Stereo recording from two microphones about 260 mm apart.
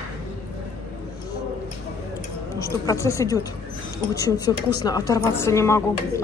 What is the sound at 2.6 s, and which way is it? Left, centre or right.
A woman's voice, centre.